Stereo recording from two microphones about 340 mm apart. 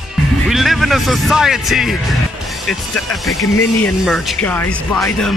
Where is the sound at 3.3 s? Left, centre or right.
Centre.